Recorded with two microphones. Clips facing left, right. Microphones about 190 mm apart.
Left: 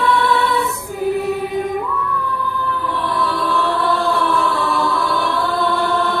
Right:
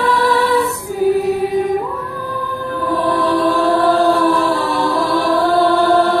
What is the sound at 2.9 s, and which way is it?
Music, 40° right (ahead or behind).